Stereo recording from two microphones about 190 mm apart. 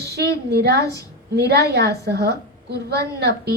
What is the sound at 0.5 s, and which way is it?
A woman's voice, 60° right (ahead or behind).